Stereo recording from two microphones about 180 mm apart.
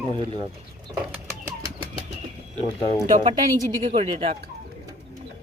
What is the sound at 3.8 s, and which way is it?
Speech, 30° right (ahead or behind).